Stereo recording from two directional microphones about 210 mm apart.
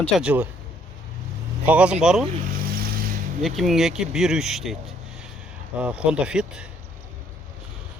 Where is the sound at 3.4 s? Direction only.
Centre (ahead or behind).